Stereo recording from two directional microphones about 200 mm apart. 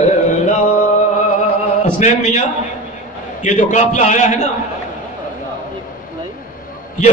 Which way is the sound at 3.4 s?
35° left (ahead or behind).